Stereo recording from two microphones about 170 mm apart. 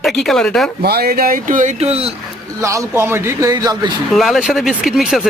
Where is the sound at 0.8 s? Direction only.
65° right (ahead or behind); by 2.1 s 35° right (ahead or behind).